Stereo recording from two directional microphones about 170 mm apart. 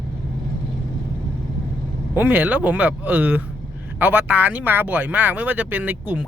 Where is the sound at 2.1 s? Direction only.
10° right (ahead or behind).